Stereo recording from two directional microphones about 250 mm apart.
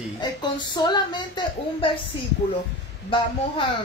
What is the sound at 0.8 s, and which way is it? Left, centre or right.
Speech, centre.